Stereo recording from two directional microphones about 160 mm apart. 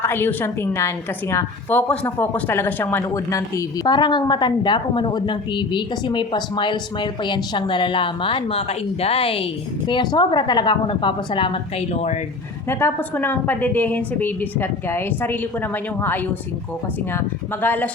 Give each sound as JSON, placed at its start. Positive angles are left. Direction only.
{"t": 0.0, "sound": "a woman's voice", "side_deg": 15}
{"t": 12.6, "sound": "a woman's voice", "side_deg": 15}